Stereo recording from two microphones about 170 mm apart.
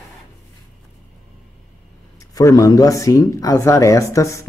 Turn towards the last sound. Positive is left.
turn(degrees=20)  # may be behind; listen again after turning